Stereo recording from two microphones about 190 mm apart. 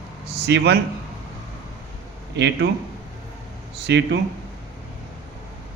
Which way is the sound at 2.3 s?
65° right (ahead or behind).